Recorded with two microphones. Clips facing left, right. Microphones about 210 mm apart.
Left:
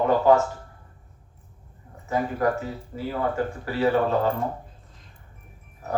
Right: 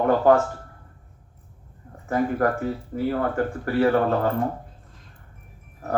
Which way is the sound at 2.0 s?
55° right (ahead or behind).